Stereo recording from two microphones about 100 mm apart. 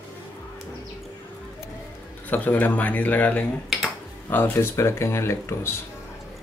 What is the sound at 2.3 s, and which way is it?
Speech, 15° left (ahead or behind).